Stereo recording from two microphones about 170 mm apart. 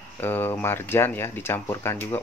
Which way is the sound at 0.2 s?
10° left (ahead or behind).